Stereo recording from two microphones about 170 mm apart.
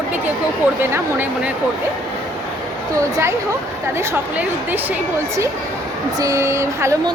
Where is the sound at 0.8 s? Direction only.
10° right (ahead or behind).